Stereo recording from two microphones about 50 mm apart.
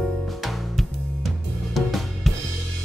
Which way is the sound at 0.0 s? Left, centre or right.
Centre.